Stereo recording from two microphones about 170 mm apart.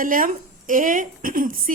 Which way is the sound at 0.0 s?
55° right (ahead or behind).